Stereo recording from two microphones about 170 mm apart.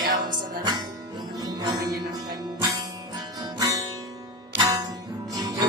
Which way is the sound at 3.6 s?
20° right (ahead or behind).